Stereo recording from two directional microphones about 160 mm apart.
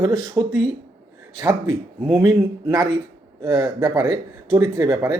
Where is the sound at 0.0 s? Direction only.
25° right (ahead or behind).